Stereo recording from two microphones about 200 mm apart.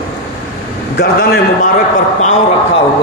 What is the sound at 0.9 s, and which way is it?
Speech, 50° left (ahead or behind).